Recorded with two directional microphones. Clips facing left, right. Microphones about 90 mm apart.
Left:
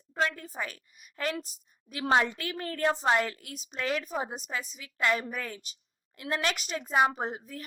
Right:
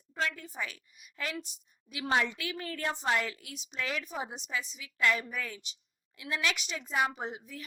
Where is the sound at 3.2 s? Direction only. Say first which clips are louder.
Left 5 dB; 45° left (ahead or behind).